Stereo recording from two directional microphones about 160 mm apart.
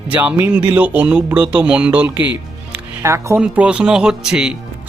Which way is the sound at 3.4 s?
5° right (ahead or behind).